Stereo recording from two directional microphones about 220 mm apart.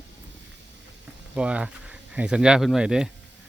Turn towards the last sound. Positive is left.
turn(degrees=-5)  # may be behind; listen again after turning